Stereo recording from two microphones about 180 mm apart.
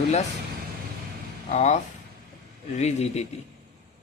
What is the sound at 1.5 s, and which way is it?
Speech, 40° left (ahead or behind).